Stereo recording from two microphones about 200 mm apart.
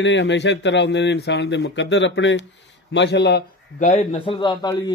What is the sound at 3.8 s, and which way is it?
A man's voice, 35° left (ahead or behind).